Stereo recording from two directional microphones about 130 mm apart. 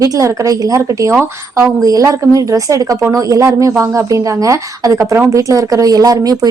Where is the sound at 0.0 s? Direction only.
25° right (ahead or behind).